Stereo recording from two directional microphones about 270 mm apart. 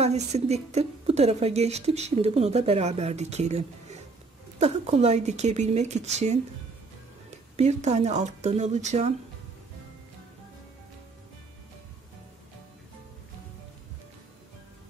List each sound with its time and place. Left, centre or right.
0.0 s a woman's voice: right
7.5 s a woman's voice: right